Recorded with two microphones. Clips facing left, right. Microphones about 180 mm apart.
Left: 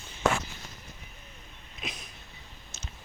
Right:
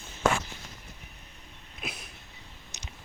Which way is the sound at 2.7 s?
15° right (ahead or behind).